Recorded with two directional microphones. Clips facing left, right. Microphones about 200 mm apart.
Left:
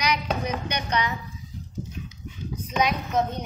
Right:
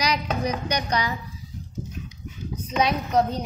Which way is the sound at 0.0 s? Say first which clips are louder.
Right 1 dB; 35° right (ahead or behind).